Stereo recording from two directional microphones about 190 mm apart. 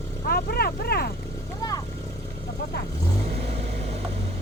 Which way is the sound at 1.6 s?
20° left (ahead or behind).